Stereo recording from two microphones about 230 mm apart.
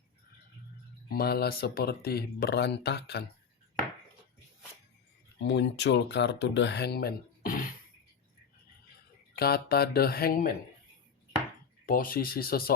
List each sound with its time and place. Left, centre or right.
1.1 s speech: left
5.4 s speech: left
9.3 s speech: left
11.9 s speech: left